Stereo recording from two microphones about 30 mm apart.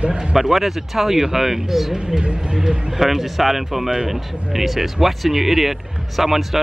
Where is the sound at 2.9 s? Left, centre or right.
Centre.